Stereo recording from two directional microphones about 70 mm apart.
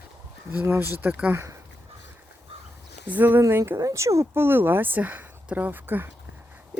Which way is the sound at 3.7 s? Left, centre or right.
Right.